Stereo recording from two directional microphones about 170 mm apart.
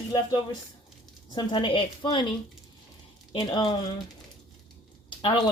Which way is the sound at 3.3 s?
30° left (ahead or behind).